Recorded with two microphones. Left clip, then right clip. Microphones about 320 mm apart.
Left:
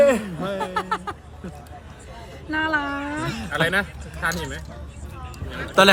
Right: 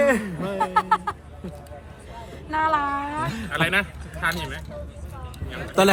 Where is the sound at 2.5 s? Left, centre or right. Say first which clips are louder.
Right 1 dB; right.